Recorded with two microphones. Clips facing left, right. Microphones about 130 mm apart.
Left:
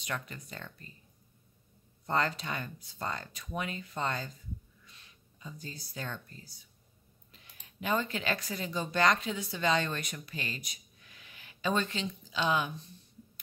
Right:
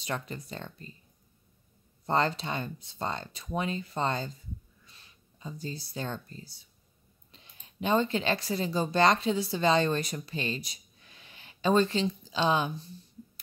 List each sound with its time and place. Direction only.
0.0 s speech: 30° right (ahead or behind)
2.0 s speech: 30° right (ahead or behind)
7.6 s speech: 25° right (ahead or behind)